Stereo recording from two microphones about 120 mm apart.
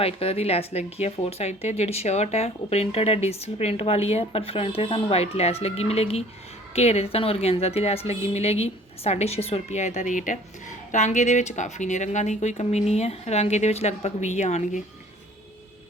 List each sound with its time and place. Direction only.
0.0 s speech: 55° left (ahead or behind); by 14.8 s 75° left (ahead or behind)